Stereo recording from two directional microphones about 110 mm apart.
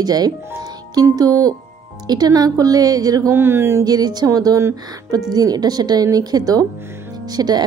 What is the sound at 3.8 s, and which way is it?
A woman's voice, 35° right (ahead or behind).